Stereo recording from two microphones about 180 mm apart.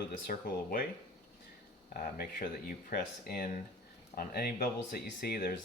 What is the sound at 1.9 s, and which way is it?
Speech, 55° left (ahead or behind).